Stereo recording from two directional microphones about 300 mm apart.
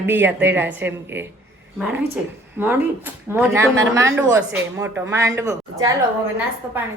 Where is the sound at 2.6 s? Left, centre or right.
Centre.